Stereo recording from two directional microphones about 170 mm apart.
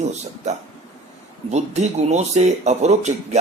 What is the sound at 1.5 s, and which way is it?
A man's voice, 40° right (ahead or behind).